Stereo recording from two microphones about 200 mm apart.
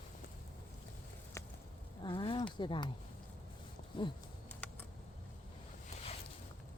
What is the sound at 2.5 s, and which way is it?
Speech, 25° left (ahead or behind).